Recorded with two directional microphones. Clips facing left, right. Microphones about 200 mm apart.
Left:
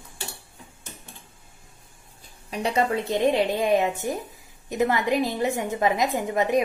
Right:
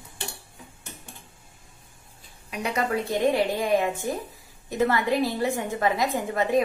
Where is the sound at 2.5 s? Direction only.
30° left (ahead or behind).